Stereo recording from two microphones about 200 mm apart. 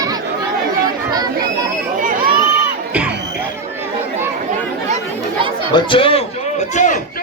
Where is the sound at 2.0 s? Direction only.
45° right (ahead or behind).